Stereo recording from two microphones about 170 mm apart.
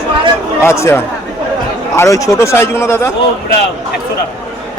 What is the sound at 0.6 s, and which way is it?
Speech, 15° left (ahead or behind).